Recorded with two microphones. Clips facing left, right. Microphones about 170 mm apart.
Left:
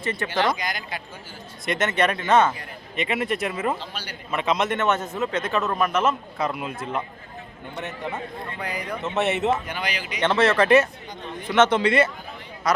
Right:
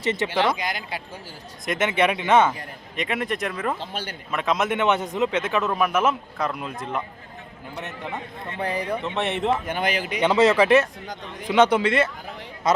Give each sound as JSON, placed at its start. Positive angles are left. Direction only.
{"t": 0.2, "sound": "a man's voice", "side_deg": -20}
{"t": 1.6, "sound": "speech", "side_deg": 0}
{"t": 1.9, "sound": "a man's voice", "side_deg": -10}
{"t": 2.9, "sound": "speech", "side_deg": 0}
{"t": 3.8, "sound": "speech", "side_deg": -50}
{"t": 4.3, "sound": "speech", "side_deg": 0}
{"t": 4.8, "sound": "a man's voice", "side_deg": -15}
{"t": 6.4, "sound": "speech", "side_deg": 5}
{"t": 8.4, "sound": "a man's voice", "side_deg": -30}
{"t": 9.0, "sound": "speech", "side_deg": 5}
{"t": 9.6, "sound": "speech", "side_deg": -50}
{"t": 10.2, "sound": "a man's voice", "side_deg": -15}
{"t": 11.8, "sound": "speech", "side_deg": 0}
{"t": 12.7, "sound": "speech", "side_deg": -25}